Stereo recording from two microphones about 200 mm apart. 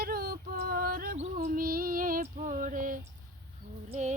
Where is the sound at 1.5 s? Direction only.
45° right (ahead or behind).